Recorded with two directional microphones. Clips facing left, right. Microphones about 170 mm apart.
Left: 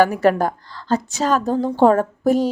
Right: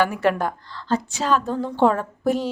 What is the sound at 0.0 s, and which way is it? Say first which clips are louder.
A woman's voice: left 5 dB; 40° left (ahead or behind).